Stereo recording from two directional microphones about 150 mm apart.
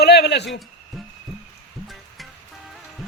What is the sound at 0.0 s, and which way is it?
Speech, 90° left.